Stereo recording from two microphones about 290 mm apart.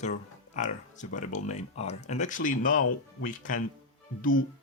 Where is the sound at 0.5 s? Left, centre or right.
Left.